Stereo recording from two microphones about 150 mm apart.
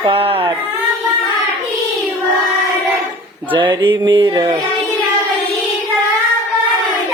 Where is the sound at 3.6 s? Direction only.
30° right (ahead or behind).